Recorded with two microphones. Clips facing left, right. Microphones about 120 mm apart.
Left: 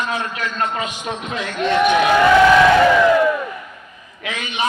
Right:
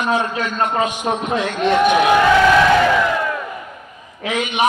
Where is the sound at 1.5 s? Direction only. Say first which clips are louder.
Even; 15° right (ahead or behind).